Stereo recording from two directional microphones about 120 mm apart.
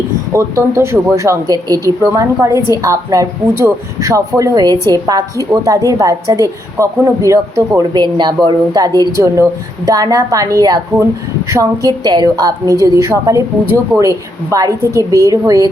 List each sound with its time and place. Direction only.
0.3 s speech: 25° right (ahead or behind)
14.5 s speech: 30° right (ahead or behind)